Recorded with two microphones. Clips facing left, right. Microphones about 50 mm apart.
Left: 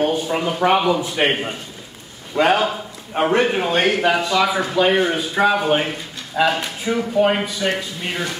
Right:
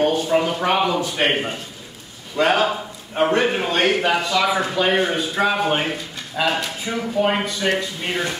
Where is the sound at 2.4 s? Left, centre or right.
Left.